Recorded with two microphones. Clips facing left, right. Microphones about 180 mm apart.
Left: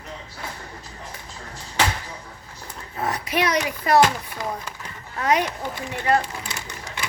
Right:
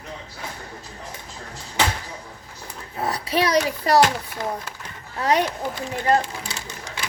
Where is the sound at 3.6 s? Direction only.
35° right (ahead or behind).